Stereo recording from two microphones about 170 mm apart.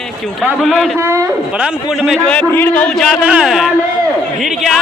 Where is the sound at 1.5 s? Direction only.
5° right (ahead or behind).